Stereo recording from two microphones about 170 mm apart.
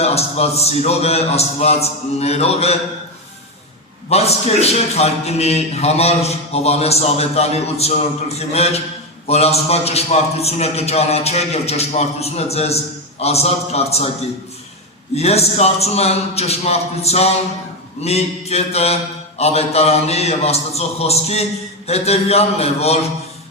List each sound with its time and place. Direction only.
0.0 s a man's voice: 40° left (ahead or behind)
4.1 s a man's voice: 40° left (ahead or behind)
15.1 s a man's voice: 40° left (ahead or behind)